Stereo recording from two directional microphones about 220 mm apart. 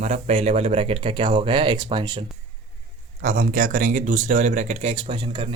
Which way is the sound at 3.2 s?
40° right (ahead or behind).